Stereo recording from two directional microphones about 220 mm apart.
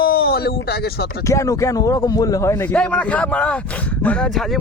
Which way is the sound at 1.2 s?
15° left (ahead or behind).